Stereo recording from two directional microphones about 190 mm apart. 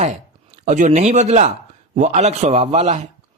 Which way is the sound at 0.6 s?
40° right (ahead or behind).